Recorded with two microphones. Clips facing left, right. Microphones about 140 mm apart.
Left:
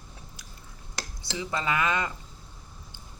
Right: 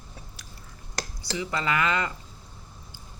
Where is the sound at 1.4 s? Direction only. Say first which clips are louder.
Right 1 dB; 20° left (ahead or behind).